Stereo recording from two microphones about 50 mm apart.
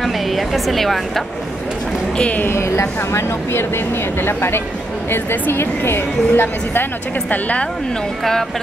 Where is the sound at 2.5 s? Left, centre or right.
Left.